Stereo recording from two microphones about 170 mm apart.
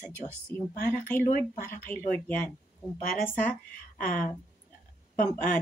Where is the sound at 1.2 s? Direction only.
55° left (ahead or behind).